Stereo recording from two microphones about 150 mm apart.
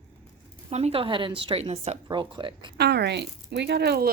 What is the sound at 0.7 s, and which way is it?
A woman's voice, 40° right (ahead or behind).